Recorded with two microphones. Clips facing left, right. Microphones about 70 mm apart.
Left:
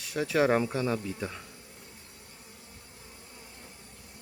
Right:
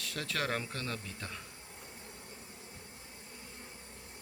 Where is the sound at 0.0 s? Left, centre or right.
Centre.